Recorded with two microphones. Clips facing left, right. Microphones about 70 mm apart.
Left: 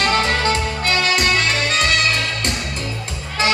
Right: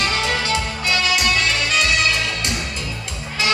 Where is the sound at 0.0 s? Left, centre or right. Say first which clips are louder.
Left 4 dB; left.